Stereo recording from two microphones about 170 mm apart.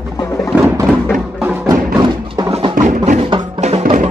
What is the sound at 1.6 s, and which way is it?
Music, 25° right (ahead or behind).